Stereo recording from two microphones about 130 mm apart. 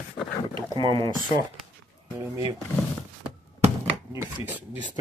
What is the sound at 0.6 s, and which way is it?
Speech, 40° right (ahead or behind).